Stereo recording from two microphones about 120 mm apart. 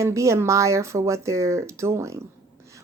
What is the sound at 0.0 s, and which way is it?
Speech, 25° right (ahead or behind).